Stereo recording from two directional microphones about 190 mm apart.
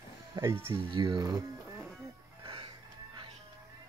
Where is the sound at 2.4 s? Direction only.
25° right (ahead or behind).